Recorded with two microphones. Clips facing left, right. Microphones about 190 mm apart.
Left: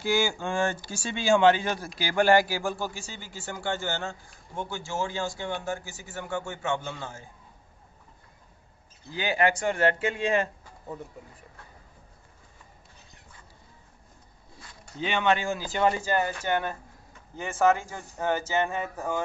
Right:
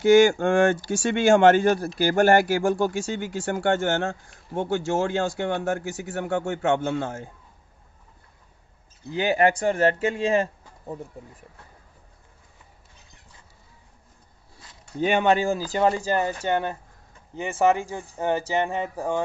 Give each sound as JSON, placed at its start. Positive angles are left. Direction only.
{"t": 0.3, "sound": "speech", "side_deg": -55}
{"t": 9.1, "sound": "speech", "side_deg": -50}
{"t": 15.0, "sound": "speech", "side_deg": -45}
{"t": 17.9, "sound": "speech", "side_deg": -20}